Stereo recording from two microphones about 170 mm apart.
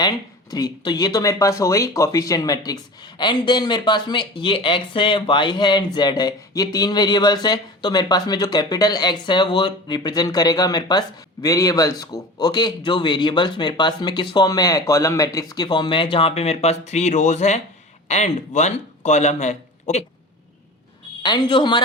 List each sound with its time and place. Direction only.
0.0 s a man's voice: 25° left (ahead or behind); by 20.1 s 40° left (ahead or behind)
21.2 s speech: 25° left (ahead or behind)